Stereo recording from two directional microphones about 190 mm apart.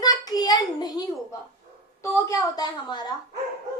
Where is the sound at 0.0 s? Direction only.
20° left (ahead or behind).